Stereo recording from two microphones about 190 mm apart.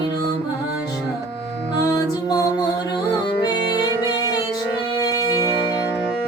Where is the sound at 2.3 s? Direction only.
20° left (ahead or behind).